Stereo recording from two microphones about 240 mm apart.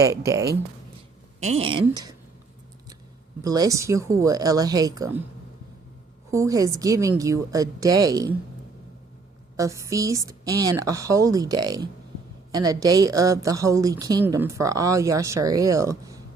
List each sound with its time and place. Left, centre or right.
0.0 s a woman's voice: centre
1.4 s a woman's voice: right
3.4 s a woman's voice: centre
6.3 s a woman's voice: centre
9.6 s a woman's voice: centre